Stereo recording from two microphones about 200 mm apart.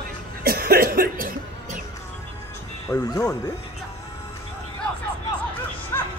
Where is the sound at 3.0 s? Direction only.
20° left (ahead or behind).